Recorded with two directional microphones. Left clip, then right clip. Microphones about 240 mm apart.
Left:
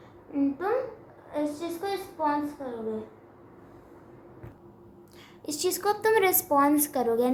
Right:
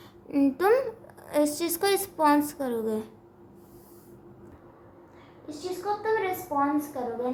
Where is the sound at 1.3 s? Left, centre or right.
Right.